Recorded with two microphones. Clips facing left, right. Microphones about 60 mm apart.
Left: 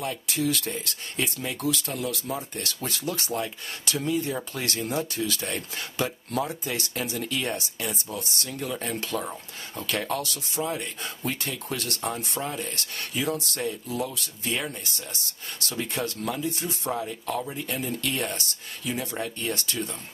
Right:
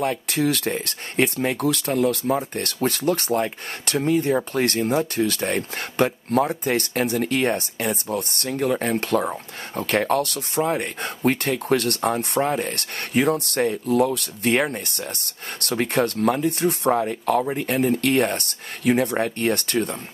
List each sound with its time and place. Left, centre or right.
0.0 s speech: right